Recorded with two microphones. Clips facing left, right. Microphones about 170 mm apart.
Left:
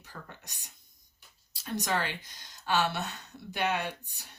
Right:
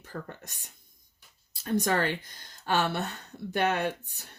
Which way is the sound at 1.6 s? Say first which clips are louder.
Right 5 dB; 50° right (ahead or behind).